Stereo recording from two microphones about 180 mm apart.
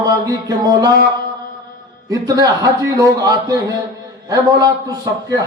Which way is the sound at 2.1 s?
20° right (ahead or behind).